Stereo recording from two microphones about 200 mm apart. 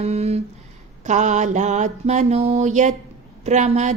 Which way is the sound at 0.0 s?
30° right (ahead or behind).